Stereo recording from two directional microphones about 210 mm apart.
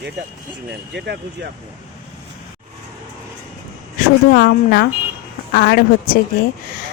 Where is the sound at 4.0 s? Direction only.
45° left (ahead or behind).